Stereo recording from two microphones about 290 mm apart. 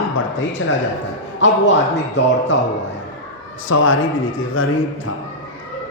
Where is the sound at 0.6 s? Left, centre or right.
Left.